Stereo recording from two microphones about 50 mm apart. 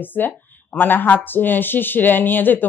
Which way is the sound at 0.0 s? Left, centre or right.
Left.